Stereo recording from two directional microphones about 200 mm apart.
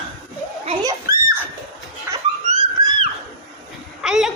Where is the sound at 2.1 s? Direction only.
10° right (ahead or behind).